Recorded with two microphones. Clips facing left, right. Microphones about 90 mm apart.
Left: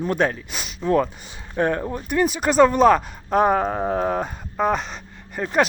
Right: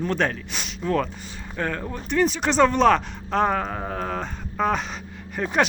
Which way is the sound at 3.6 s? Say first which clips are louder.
Left 6 dB; 25° left (ahead or behind).